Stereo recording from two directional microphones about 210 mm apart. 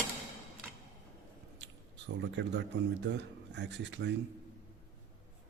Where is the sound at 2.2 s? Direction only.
55° right (ahead or behind).